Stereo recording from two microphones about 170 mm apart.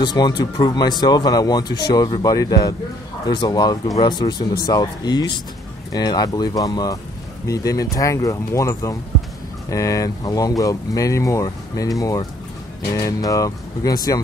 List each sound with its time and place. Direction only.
0.0 s speech: 25° left (ahead or behind)